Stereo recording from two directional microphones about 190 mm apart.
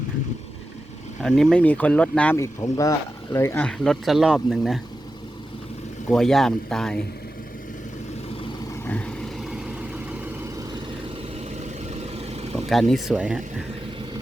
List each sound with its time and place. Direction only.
1.2 s speech: 5° left (ahead or behind)
6.1 s speech: centre (ahead or behind)
8.8 s vehicle: 10° left (ahead or behind); by 10.2 s 5° right (ahead or behind)
11.9 s vehicle: 35° right (ahead or behind)
12.9 s speech: 5° right (ahead or behind)